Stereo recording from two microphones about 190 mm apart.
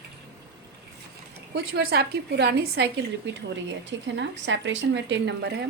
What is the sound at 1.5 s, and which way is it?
Speech, 55° right (ahead or behind).